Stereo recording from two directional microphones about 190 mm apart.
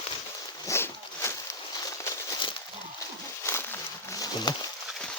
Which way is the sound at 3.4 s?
10° left (ahead or behind).